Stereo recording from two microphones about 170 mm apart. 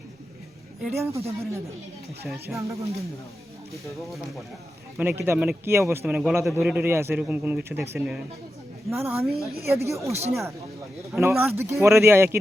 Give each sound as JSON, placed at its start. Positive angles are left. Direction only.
{"t": 0.9, "sound": "speech", "side_deg": -15}
{"t": 2.2, "sound": "speech", "side_deg": 0}
{"t": 4.9, "sound": "speech", "side_deg": -10}
{"t": 9.2, "sound": "speech", "side_deg": 0}
{"t": 9.6, "sound": "speech", "side_deg": -15}
{"t": 10.1, "sound": "speech", "side_deg": -40}
{"t": 11.1, "sound": "speech", "side_deg": -15}